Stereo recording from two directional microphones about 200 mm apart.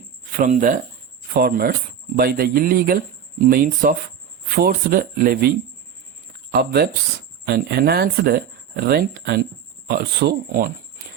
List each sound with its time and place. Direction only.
0.3 s speech: 40° right (ahead or behind)
1.3 s speech: 50° right (ahead or behind)
6.5 s speech: 50° right (ahead or behind)